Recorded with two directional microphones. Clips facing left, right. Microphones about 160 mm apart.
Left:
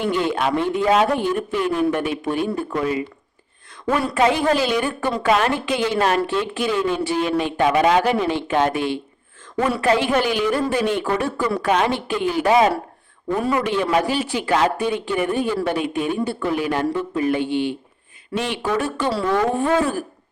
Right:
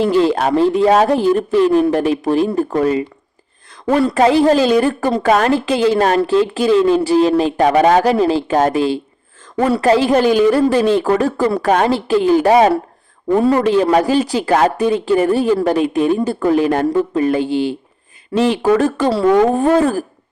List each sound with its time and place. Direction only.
0.0 s speech: 35° right (ahead or behind)